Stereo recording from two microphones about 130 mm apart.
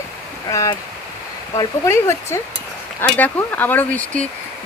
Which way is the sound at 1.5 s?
20° left (ahead or behind).